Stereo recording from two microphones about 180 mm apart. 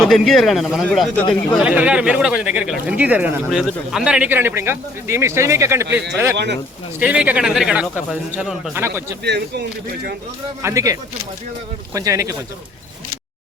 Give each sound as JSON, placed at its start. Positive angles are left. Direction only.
{"t": 0.0, "sound": "a man's voice", "side_deg": 0}
{"t": 1.5, "sound": "speech", "side_deg": -5}
{"t": 6.3, "sound": "speech", "side_deg": -70}
{"t": 7.0, "sound": "a man's voice", "side_deg": -5}
{"t": 8.7, "sound": "speech", "side_deg": -15}
{"t": 9.2, "sound": "speech", "side_deg": -65}
{"t": 10.6, "sound": "speech", "side_deg": -15}
{"t": 11.9, "sound": "speech", "side_deg": -15}